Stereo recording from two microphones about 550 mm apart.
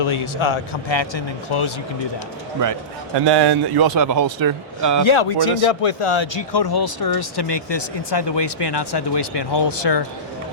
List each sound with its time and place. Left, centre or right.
0.0 s a man's voice: left
3.2 s speech: right
5.0 s speech: left